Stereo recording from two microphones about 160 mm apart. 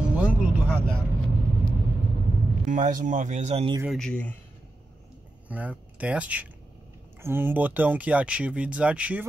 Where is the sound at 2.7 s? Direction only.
55° right (ahead or behind).